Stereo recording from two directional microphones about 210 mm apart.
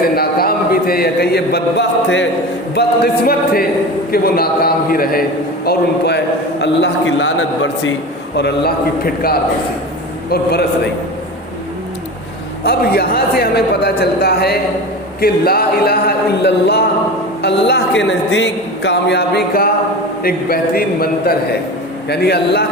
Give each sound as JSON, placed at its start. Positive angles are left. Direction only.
{"t": 0.2, "sound": "speech", "side_deg": 45}
{"t": 2.7, "sound": "a man's voice", "side_deg": 45}
{"t": 8.4, "sound": "a man's voice", "side_deg": 50}
{"t": 12.6, "sound": "a man's voice", "side_deg": 50}